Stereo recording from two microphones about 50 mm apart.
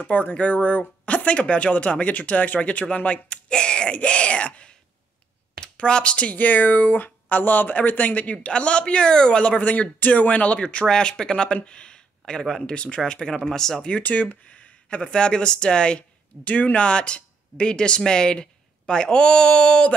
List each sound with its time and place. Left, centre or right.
0.0 s speech: left
5.8 s speech: left
13.8 s speech: left